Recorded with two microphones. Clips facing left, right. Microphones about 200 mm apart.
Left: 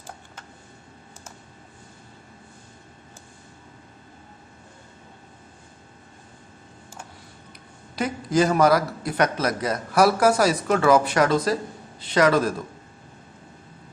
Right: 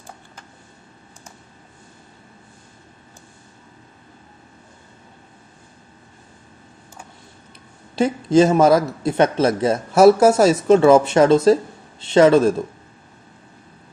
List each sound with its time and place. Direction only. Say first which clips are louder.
7.9 s a man's voice: right 8 dB; 25° right (ahead or behind)